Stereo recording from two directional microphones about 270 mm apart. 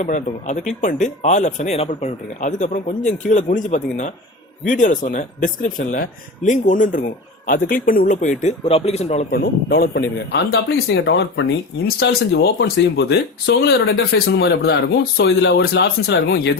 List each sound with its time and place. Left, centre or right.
0.0 s speech: left